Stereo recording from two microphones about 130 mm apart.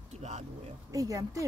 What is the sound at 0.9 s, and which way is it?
Speech, 25° right (ahead or behind).